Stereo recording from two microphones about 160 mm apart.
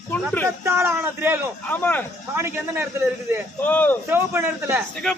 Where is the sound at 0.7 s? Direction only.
15° right (ahead or behind).